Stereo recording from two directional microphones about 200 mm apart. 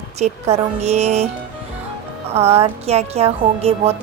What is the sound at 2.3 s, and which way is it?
Music, 30° right (ahead or behind).